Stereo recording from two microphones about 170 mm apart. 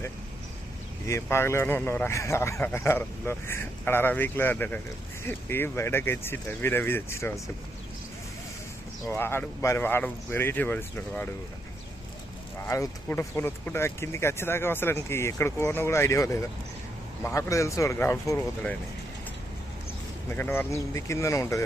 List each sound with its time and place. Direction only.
1.0 s speech: 15° left (ahead or behind)
9.0 s speech: 15° left (ahead or behind)
12.6 s speech: 15° left (ahead or behind)
20.3 s speech: 15° left (ahead or behind)